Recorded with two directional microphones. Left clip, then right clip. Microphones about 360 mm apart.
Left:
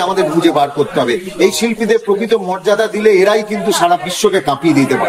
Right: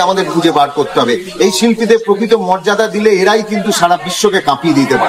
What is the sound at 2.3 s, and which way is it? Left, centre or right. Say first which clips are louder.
A man's voice: right 3 dB; centre.